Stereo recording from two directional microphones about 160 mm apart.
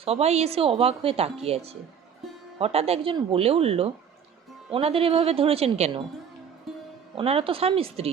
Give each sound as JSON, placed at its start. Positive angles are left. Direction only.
{"t": 0.0, "sound": "a woman's voice", "side_deg": -40}
{"t": 7.2, "sound": "a woman's voice", "side_deg": -35}